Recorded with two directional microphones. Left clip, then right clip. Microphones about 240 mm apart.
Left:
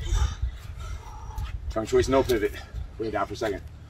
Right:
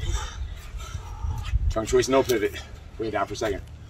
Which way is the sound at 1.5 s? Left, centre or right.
Centre.